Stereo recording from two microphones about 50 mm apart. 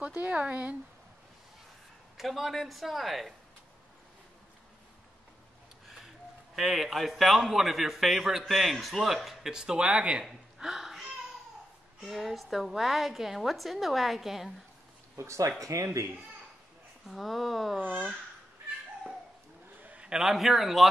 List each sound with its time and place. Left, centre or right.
0.3 s speech: right
2.1 s a man's voice: centre
6.5 s a man's voice: centre
9.5 s speech: centre
10.6 s a sound: centre
12.1 s a man's voice: centre
15.1 s speech: right
17.1 s a man's voice: centre
19.8 s a sound: right
20.1 s a man's voice: centre